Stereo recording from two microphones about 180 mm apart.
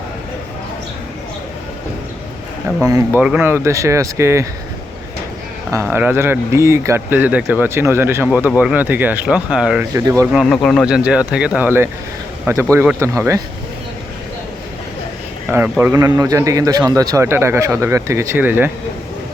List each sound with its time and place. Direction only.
3.2 s speech: 5° right (ahead or behind)
5.7 s speech: 10° right (ahead or behind)
9.9 s speech: 15° right (ahead or behind)
10.3 s speech: centre (ahead or behind); by 13.4 s 15° right (ahead or behind)
15.8 s speech: 15° right (ahead or behind)